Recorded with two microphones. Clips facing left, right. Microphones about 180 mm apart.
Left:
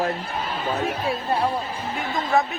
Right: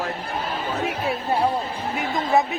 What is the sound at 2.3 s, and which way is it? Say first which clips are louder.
Speech: right 1 dB; 20° right (ahead or behind).